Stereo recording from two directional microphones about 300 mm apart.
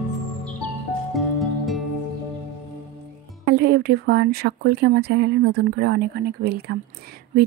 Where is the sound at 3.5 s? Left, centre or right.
Right.